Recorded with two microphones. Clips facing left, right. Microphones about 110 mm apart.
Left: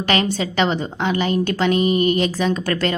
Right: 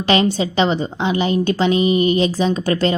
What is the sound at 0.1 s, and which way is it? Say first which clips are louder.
A woman's voice: right 4 dB; 20° right (ahead or behind).